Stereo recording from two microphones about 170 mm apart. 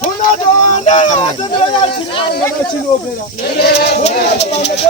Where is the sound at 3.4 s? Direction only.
75° left (ahead or behind).